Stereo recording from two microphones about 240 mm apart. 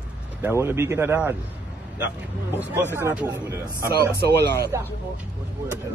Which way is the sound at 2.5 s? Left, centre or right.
Centre.